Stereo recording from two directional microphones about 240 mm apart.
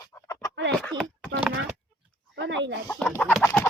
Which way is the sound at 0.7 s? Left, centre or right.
Centre.